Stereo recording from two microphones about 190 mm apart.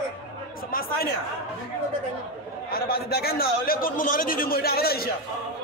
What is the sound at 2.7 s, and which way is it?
A man's voice, 55° left (ahead or behind).